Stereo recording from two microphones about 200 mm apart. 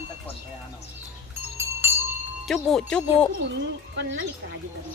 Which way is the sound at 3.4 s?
65° right (ahead or behind).